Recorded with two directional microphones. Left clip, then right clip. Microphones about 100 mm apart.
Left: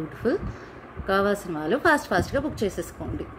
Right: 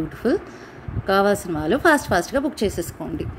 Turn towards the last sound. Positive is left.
turn(degrees=-65)  # may be behind; listen again after turning